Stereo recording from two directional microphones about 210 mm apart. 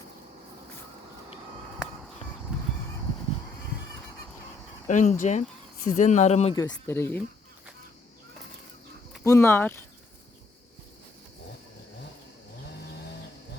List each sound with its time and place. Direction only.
2.5 s honk: 5° right (ahead or behind)
4.9 s speech: 35° left (ahead or behind)
6.7 s speech: 10° left (ahead or behind)
9.2 s speech: 15° left (ahead or behind)